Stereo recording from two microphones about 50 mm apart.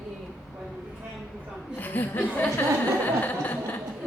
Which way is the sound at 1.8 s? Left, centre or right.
Left.